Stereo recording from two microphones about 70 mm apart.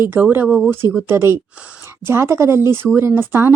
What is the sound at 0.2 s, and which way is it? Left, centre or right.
Speech, right.